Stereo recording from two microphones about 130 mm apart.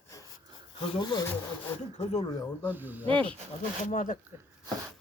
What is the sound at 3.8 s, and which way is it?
Speech, 85° left.